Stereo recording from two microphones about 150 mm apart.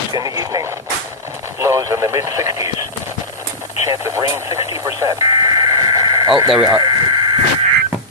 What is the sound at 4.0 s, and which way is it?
Speech, 20° right (ahead or behind).